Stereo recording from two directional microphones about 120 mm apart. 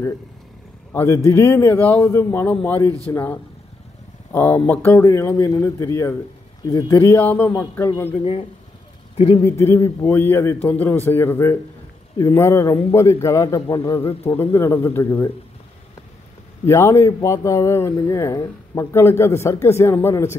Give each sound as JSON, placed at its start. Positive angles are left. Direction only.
{"t": 0.9, "sound": "a man's voice", "side_deg": 25}
{"t": 7.2, "sound": "a man's voice", "side_deg": 15}
{"t": 8.2, "sound": "speech", "side_deg": 55}
{"t": 9.4, "sound": "speech", "side_deg": 25}
{"t": 16.6, "sound": "speech", "side_deg": 20}